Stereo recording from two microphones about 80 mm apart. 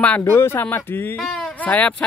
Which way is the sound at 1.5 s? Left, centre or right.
Centre.